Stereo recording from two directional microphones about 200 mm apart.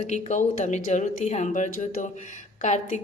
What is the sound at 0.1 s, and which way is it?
Speech, 40° left (ahead or behind).